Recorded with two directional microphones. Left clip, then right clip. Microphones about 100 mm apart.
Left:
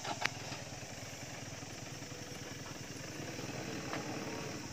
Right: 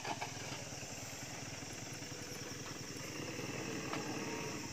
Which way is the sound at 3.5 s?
30° left (ahead or behind).